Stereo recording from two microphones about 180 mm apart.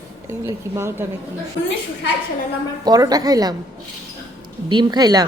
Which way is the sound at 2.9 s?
20° right (ahead or behind).